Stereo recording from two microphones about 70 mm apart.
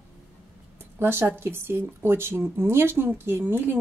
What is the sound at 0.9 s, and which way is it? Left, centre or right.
A woman's voice, right.